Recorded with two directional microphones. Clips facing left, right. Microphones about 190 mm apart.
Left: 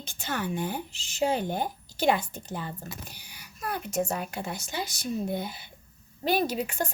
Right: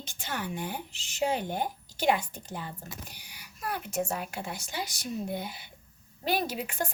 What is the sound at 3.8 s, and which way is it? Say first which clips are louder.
Speech: left 4 dB; 40° left (ahead or behind).